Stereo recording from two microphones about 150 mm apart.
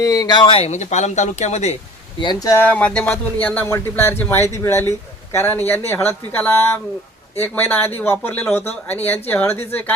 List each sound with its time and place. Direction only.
0.0 s speech: 25° left (ahead or behind); by 1.7 s 50° left (ahead or behind)
2.2 s speech: 25° left (ahead or behind)
2.6 s speech: 10° left (ahead or behind)